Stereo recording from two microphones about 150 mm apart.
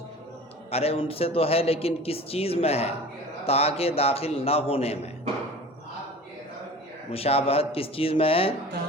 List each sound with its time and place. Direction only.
0.7 s a man's voice: 40° left (ahead or behind)
7.1 s a man's voice: 40° left (ahead or behind)